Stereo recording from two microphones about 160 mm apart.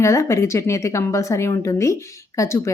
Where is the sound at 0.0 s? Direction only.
20° left (ahead or behind).